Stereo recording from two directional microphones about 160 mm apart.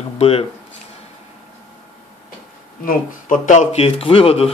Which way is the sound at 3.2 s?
50° left (ahead or behind).